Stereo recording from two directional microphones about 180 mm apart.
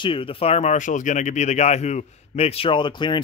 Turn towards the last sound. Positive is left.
turn(degrees=25)  # may be behind; listen again after turning